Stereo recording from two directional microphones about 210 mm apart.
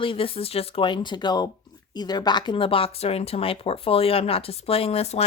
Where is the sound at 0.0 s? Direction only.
25° left (ahead or behind).